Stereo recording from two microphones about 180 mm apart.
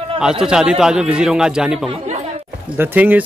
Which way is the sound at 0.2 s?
5° right (ahead or behind).